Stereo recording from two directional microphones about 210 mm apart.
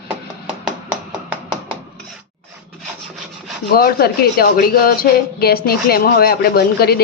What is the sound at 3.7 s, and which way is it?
A woman's voice, 45° left (ahead or behind).